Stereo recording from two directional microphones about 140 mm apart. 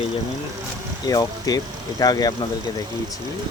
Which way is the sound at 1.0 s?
25° left (ahead or behind).